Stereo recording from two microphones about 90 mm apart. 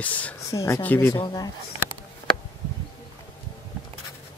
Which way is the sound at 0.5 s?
35° left (ahead or behind).